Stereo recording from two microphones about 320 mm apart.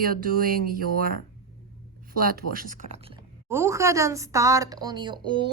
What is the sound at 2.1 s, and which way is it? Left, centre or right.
A woman's voice, right.